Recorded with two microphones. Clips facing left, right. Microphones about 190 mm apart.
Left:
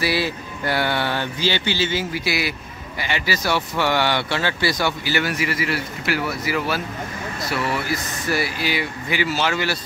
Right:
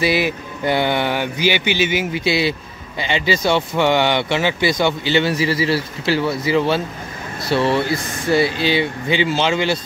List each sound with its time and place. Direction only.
0.0 s speech: 20° right (ahead or behind)